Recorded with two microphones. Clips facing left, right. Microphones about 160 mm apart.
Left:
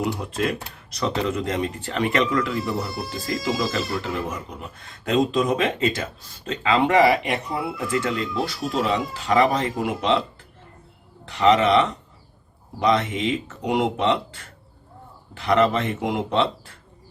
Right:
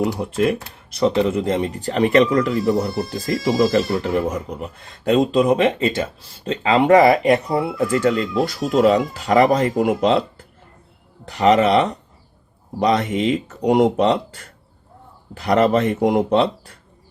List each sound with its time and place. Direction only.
0.0 s speech: 30° right (ahead or behind)
11.3 s speech: 40° right (ahead or behind)